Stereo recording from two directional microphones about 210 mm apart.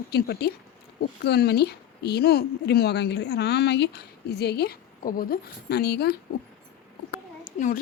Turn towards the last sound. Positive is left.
turn(degrees=35)  # may be behind; listen again after turning